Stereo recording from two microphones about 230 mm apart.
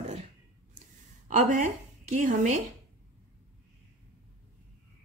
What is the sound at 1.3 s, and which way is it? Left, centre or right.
A woman's voice, right.